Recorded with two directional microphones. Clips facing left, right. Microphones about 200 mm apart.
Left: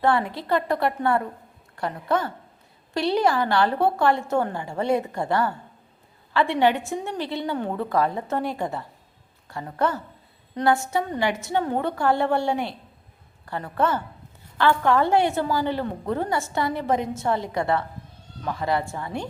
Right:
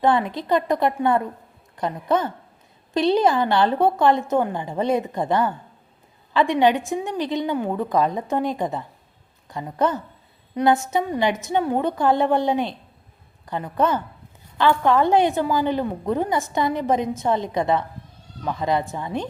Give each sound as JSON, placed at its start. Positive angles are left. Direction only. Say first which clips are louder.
{"t": 0.0, "sound": "a woman's voice", "louder": "right 2 dB", "side_deg": -20}